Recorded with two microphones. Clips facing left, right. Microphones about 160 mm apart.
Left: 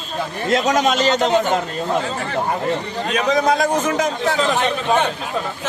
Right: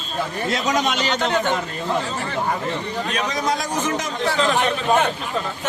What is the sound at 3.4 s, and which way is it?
A man's voice, 55° left (ahead or behind).